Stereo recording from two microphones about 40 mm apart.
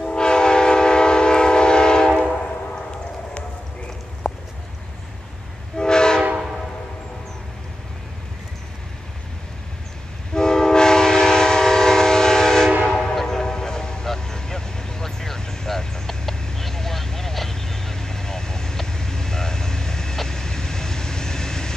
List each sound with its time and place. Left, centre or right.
0.0 s train: left
4.2 s a sound: centre
5.8 s train: centre
10.3 s train: centre
14.0 s vehicle: centre